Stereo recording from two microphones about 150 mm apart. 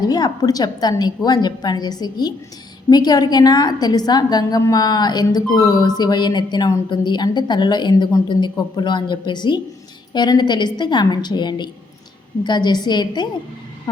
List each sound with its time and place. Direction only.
0.0 s a woman's voice: 25° left (ahead or behind)